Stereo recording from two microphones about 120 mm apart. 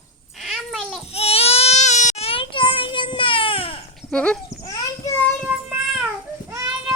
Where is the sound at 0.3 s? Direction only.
Centre (ahead or behind).